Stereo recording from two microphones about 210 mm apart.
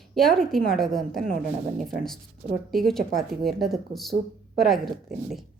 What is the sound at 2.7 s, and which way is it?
Speech, centre (ahead or behind).